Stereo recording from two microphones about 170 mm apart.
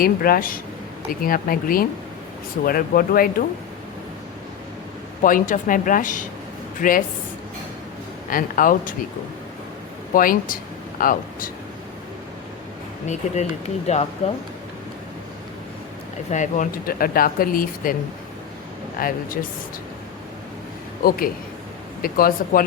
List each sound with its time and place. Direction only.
0.0 s speech: 60° left (ahead or behind)
5.2 s speech: 50° left (ahead or behind)
8.3 s speech: 55° left (ahead or behind)
10.2 s speech: 55° left (ahead or behind)
13.1 s speech: 40° left (ahead or behind)
16.3 s speech: 45° left (ahead or behind)
18.9 s speech: 55° left (ahead or behind)
21.0 s speech: 55° left (ahead or behind)